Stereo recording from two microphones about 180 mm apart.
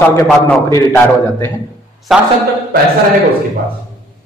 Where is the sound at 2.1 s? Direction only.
Centre (ahead or behind).